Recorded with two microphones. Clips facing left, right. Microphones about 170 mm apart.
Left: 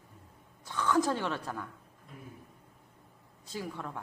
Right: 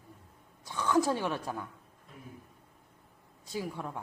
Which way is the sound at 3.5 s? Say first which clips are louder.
Right 2 dB; 10° right (ahead or behind).